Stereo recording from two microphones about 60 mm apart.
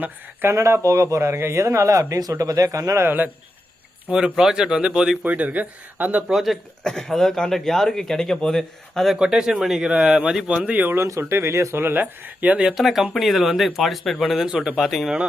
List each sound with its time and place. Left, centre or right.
0.5 s speech: right
1.2 s speech: right
3.0 s a man's voice: right
4.1 s speech: centre
5.2 s speech: right
6.2 s speech: centre
6.8 s speech: centre
9.1 s speech: centre
9.9 s speech: right
10.2 s speech: centre
10.9 s speech: right
12.6 s speech: centre
14.5 s speech: centre
14.8 s speech: centre